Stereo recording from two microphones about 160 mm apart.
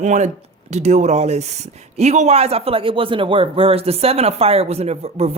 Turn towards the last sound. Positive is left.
turn(degrees=-40)  # may be behind; listen again after turning